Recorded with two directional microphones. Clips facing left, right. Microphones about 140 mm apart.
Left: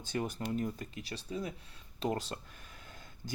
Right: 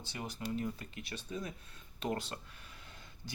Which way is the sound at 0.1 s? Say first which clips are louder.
Left 5 dB; 50° left (ahead or behind).